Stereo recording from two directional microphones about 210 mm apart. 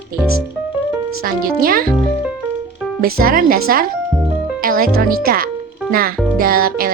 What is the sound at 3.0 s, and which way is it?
Speech, 45° right (ahead or behind).